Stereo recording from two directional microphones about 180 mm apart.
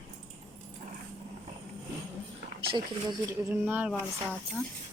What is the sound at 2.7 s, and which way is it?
Speech, 20° right (ahead or behind).